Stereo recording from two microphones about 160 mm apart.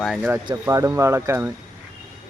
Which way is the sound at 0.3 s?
20° right (ahead or behind).